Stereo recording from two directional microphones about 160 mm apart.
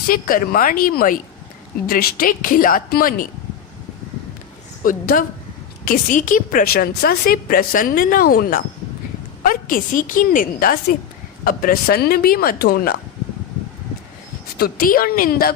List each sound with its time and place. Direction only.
0.1 s a woman's voice: 60° left (ahead or behind)
4.8 s a woman's voice: 60° left (ahead or behind)
14.6 s speech: 65° left (ahead or behind)